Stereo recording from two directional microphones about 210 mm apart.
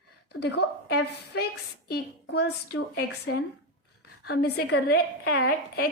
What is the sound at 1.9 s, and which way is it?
A woman's voice, 50° left (ahead or behind).